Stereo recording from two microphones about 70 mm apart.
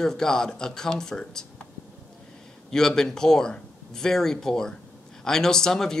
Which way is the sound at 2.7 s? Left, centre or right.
Centre.